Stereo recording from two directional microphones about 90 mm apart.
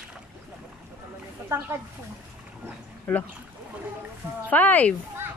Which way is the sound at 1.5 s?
35° right (ahead or behind).